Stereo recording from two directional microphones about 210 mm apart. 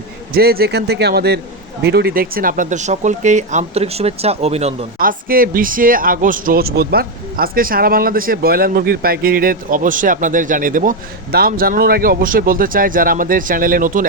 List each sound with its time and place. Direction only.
0.3 s speech: 45° right (ahead or behind); by 4.9 s 30° right (ahead or behind)
4.9 s speech: 45° right (ahead or behind)